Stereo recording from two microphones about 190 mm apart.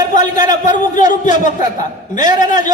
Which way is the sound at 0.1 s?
40° left (ahead or behind).